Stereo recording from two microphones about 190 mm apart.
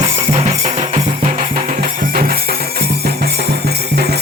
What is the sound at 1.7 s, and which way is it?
Music, 50° right (ahead or behind).